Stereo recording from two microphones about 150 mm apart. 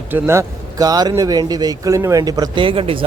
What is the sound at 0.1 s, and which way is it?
Speech, 15° right (ahead or behind).